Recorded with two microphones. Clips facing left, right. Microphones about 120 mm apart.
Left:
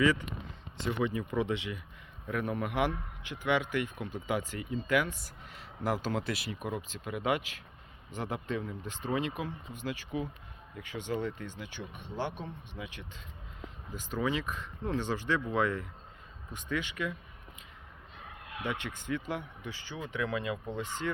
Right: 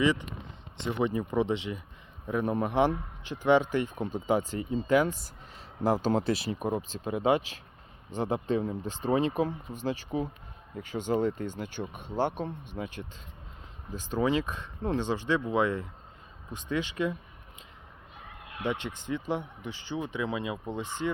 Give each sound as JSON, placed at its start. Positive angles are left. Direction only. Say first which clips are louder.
{"t": 0.0, "sound": "a man's voice", "louder": "right 1 dB", "side_deg": -20}
{"t": 13.9, "sound": "speech", "louder": "right 5 dB", "side_deg": -30}
{"t": 18.6, "sound": "speech", "louder": "right 5 dB", "side_deg": -25}